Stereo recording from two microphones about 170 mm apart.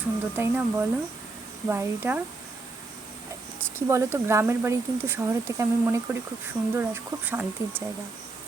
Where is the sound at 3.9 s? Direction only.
15° right (ahead or behind).